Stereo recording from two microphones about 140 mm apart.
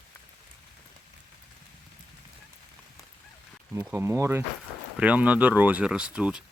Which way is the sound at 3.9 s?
20° right (ahead or behind).